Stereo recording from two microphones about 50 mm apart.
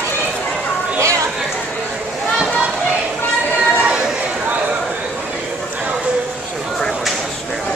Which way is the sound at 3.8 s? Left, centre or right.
Centre.